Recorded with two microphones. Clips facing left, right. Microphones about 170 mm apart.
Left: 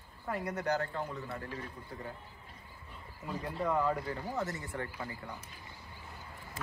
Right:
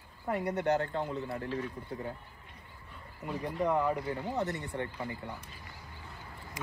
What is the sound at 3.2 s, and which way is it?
Speech, 15° right (ahead or behind).